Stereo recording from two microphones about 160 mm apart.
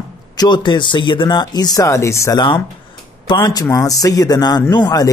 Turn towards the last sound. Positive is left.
turn(degrees=25)  # may be behind; listen again after turning